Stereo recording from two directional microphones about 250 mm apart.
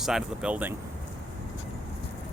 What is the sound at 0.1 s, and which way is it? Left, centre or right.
Speech, centre.